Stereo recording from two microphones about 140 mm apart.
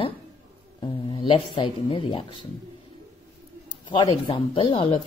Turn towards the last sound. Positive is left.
turn(degrees=40)  # may be behind; listen again after turning